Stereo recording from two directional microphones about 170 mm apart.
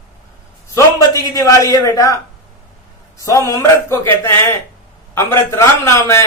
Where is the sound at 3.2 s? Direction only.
20° left (ahead or behind).